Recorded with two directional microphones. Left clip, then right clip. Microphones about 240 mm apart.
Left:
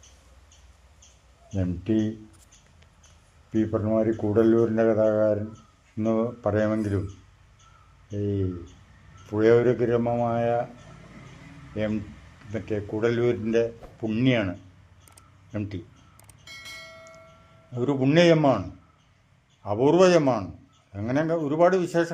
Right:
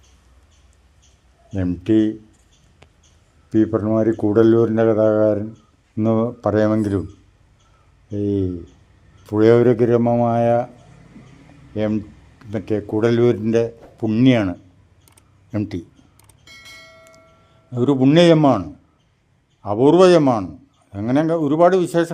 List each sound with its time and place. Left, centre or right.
1.5 s speech: right
3.5 s speech: right
8.1 s speech: right
11.7 s speech: right
16.2 s bell: centre
17.7 s speech: right
19.6 s speech: right